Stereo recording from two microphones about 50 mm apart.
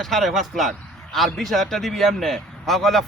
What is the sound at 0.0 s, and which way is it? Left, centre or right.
A man's voice, centre.